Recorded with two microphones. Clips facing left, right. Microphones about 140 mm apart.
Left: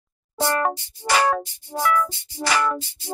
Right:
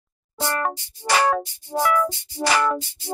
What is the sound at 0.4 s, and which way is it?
Music, 10° left (ahead or behind).